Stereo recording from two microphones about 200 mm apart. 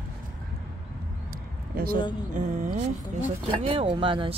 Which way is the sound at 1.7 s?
50° right (ahead or behind).